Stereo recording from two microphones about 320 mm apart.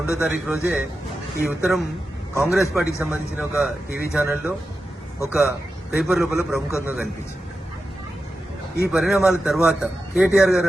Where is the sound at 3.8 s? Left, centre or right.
Left.